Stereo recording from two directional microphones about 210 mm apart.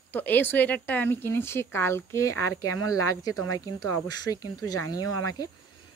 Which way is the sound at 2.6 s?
90° left.